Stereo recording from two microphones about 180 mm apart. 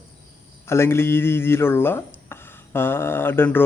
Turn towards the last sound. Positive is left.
turn(degrees=10)  # may be behind; listen again after turning